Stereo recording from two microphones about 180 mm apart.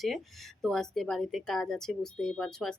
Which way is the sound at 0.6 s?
Centre (ahead or behind).